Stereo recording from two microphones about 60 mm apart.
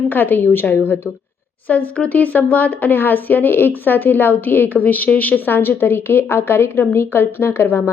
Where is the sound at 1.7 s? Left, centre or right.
Left.